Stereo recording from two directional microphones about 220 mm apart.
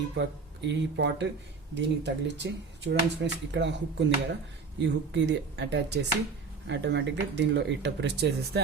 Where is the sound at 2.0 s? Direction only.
50° right (ahead or behind).